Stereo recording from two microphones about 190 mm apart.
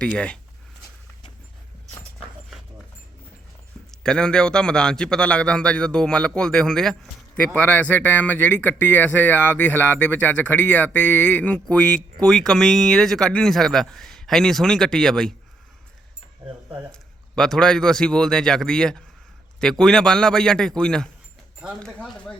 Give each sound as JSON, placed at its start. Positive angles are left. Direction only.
{"t": 0.0, "sound": "a man's voice", "side_deg": 5}
{"t": 3.9, "sound": "a man's voice", "side_deg": 5}
{"t": 16.9, "sound": "a man's voice", "side_deg": 5}